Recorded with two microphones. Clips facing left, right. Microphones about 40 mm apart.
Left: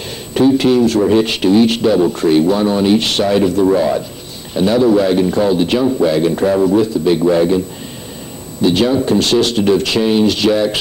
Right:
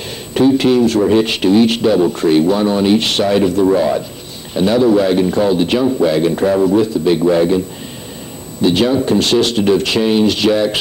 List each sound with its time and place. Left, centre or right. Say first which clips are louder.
0.0 s a man's voice: even; right